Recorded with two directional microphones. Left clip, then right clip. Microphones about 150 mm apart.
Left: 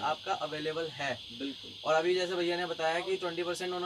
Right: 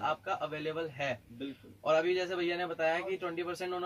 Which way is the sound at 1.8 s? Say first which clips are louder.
Left 1 dB; 5° right (ahead or behind).